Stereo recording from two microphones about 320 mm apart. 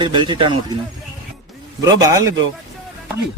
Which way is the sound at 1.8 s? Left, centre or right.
Centre.